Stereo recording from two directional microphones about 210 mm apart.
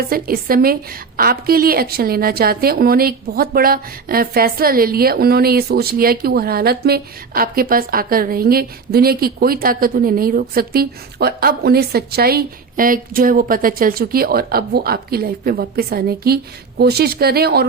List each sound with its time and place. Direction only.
0.1 s a woman's voice: 45° right (ahead or behind)